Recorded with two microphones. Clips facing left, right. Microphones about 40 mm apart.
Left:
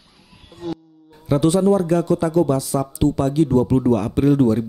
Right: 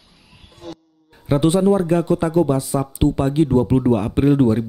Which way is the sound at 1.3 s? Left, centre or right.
Right.